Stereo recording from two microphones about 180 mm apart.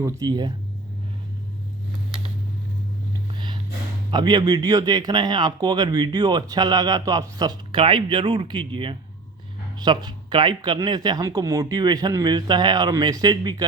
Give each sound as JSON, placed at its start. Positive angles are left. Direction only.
{"t": 0.0, "sound": "speech", "side_deg": -20}
{"t": 3.3, "sound": "a sound", "side_deg": -25}
{"t": 4.1, "sound": "speech", "side_deg": -25}